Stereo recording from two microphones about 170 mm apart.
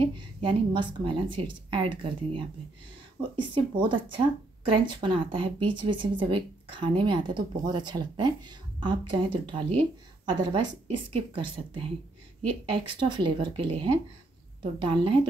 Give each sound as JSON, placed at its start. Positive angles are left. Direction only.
{"t": 0.0, "sound": "a woman's voice", "side_deg": -30}